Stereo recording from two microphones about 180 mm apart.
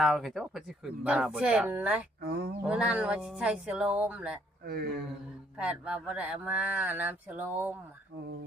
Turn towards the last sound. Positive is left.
turn(degrees=-10)  # may be behind; listen again after turning